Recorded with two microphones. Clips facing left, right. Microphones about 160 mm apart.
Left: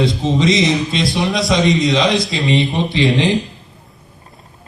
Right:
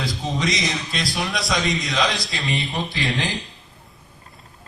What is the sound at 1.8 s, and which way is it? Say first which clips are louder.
Speech: left 8 dB; 25° left (ahead or behind).